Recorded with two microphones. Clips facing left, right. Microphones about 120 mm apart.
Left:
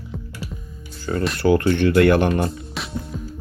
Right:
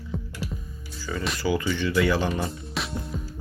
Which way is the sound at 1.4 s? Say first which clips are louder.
Left 9 dB; 65° left (ahead or behind).